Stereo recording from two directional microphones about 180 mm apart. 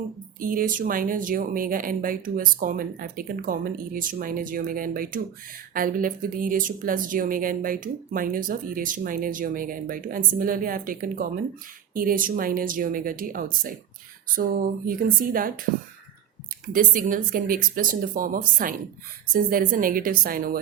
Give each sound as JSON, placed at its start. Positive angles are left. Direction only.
{"t": 0.3, "sound": "speech", "side_deg": -50}
{"t": 16.7, "sound": "speech", "side_deg": -50}